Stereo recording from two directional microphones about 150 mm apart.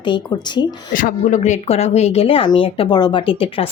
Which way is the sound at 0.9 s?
65° left (ahead or behind).